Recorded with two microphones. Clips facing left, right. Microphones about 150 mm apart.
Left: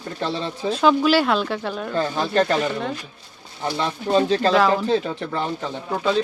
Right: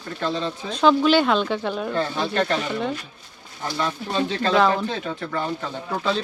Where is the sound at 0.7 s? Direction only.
5° left (ahead or behind).